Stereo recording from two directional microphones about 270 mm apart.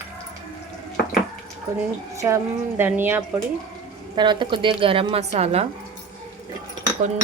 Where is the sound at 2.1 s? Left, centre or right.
Centre.